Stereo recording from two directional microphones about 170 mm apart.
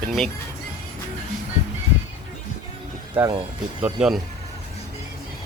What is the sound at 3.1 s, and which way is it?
Speech, 25° right (ahead or behind).